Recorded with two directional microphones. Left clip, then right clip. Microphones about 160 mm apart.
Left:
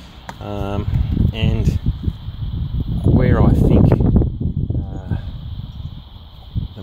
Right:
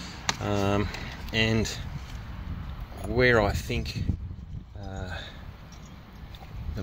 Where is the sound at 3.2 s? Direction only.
5° right (ahead or behind).